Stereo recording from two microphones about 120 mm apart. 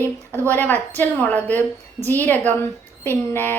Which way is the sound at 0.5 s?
15° left (ahead or behind).